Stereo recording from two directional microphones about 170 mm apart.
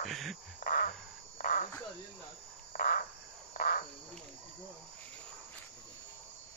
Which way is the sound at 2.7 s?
55° left (ahead or behind).